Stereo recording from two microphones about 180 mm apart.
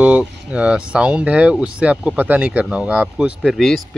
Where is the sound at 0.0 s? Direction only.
5° right (ahead or behind).